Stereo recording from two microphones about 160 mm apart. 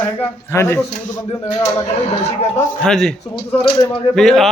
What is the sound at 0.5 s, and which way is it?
Speech, 15° left (ahead or behind).